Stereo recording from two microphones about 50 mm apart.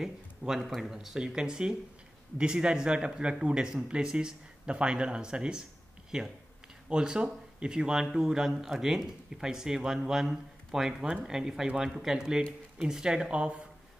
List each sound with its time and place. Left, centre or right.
0.0 s speech: centre